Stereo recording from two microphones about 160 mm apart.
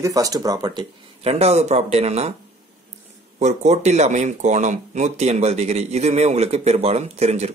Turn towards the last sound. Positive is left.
turn(degrees=-45)  # may be behind; listen again after turning